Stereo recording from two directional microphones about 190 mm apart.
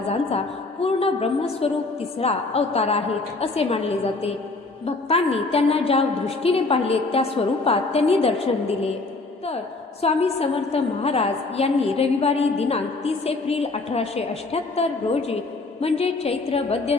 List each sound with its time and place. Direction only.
0.1 s a woman's voice: 35° left (ahead or behind)
10.0 s a woman's voice: 30° left (ahead or behind)